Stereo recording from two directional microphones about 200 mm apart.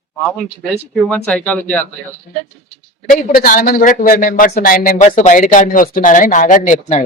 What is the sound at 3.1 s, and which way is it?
Speech, 45° left (ahead or behind).